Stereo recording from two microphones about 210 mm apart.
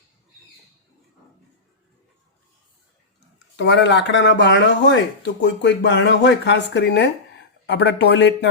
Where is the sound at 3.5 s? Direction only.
55° left (ahead or behind).